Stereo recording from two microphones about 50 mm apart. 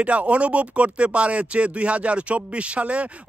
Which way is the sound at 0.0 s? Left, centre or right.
Right.